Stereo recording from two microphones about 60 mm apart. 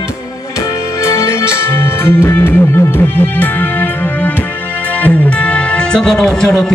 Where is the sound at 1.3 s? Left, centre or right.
Left.